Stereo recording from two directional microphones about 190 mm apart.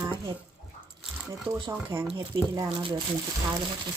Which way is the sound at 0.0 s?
20° right (ahead or behind).